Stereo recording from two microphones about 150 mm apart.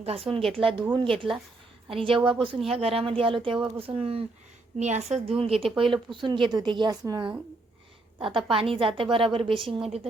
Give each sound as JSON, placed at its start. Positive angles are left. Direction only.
{"t": 0.0, "sound": "speech", "side_deg": -40}
{"t": 4.8, "sound": "speech", "side_deg": -50}
{"t": 8.4, "sound": "speech", "side_deg": -35}